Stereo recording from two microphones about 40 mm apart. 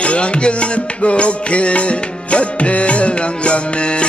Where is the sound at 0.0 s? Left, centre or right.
Left.